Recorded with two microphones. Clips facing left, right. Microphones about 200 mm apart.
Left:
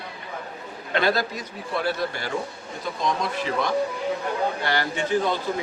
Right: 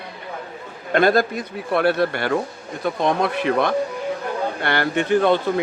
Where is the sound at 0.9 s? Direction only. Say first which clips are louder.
Right 7 dB; 50° right (ahead or behind).